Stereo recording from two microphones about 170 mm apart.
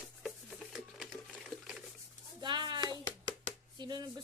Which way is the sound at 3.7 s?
25° right (ahead or behind).